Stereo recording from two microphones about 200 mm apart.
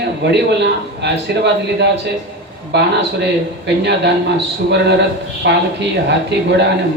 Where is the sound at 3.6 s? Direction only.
60° right (ahead or behind).